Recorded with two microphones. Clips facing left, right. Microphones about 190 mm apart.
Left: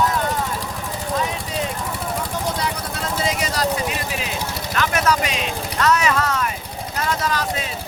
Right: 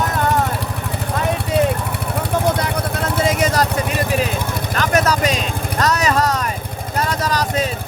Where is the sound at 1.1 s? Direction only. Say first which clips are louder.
Right 6 dB; 60° right (ahead or behind).